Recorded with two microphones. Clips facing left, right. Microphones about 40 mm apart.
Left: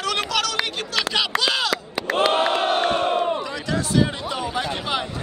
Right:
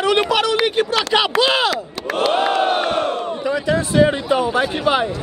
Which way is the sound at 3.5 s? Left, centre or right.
Right.